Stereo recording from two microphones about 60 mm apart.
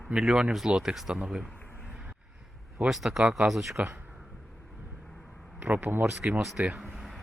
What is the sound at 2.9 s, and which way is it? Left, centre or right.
Speech, centre.